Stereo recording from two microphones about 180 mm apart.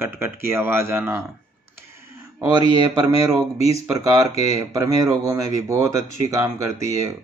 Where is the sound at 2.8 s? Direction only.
25° right (ahead or behind).